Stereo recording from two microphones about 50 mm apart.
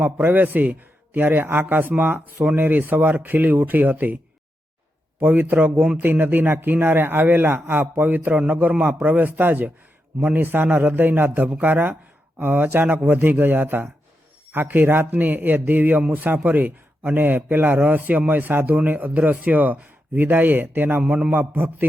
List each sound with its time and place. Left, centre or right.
0.0 s a man's voice: right
5.2 s a man's voice: right
21.0 s a man's voice: right
21.3 s a man's voice: right